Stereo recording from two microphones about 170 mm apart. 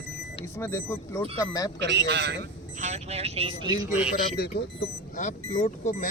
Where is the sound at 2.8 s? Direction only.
40° right (ahead or behind).